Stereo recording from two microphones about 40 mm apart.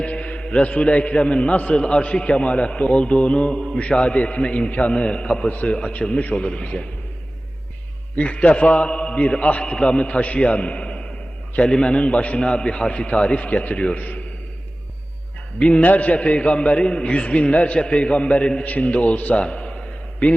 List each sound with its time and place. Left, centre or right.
0.0 s a man's voice: left
8.2 s a man's voice: left
8.9 s mantra: left
9.1 s a man's voice: left
9.6 s a man's voice: left
9.9 s a man's voice: left
15.5 s a man's voice: left
19.5 s a sound: left